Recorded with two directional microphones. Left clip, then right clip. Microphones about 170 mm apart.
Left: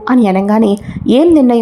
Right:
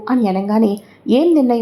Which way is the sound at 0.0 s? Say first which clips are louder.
Left 6 dB; 25° left (ahead or behind).